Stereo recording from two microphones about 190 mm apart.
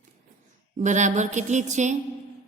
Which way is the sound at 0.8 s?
40° right (ahead or behind).